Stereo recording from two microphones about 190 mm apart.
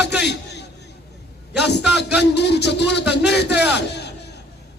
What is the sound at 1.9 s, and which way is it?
A man's voice, 60° left (ahead or behind).